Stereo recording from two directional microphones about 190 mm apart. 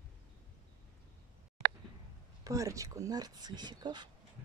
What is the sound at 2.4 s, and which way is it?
Speech, 15° right (ahead or behind).